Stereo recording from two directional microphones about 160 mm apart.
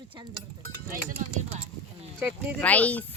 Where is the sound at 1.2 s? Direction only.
50° right (ahead or behind).